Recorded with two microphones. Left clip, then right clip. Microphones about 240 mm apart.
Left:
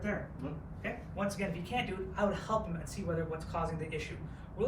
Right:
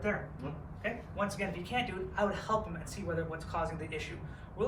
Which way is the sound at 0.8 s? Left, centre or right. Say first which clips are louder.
Right 2 dB; centre.